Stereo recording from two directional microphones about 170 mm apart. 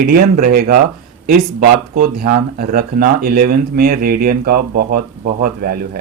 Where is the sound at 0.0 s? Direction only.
55° right (ahead or behind).